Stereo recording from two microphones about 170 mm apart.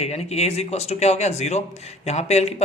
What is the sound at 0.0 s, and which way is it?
Speech, 40° left (ahead or behind).